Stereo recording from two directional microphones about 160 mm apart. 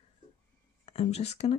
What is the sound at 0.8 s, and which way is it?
Speech, 40° left (ahead or behind).